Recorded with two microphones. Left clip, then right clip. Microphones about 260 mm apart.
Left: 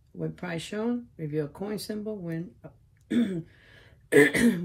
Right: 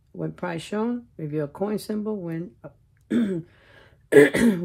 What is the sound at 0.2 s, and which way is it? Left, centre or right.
Speech, right.